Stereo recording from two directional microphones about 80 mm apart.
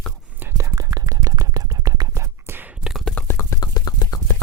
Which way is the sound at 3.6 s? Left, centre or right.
Left.